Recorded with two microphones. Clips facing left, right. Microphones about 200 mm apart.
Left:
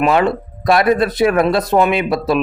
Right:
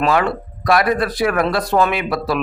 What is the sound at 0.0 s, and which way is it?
A man's voice, 20° left (ahead or behind).